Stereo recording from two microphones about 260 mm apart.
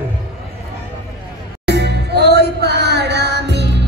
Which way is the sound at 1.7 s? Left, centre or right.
Right.